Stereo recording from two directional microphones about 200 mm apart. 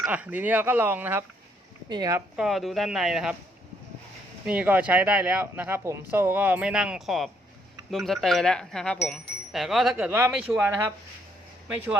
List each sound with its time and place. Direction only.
0.1 s speech: 10° right (ahead or behind)
2.3 s speech: centre (ahead or behind)
4.4 s speech: 10° right (ahead or behind)